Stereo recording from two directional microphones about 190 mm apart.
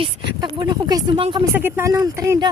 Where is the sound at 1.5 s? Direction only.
10° right (ahead or behind).